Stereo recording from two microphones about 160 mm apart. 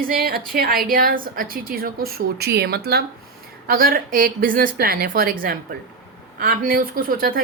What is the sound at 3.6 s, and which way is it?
Speech, 65° right (ahead or behind).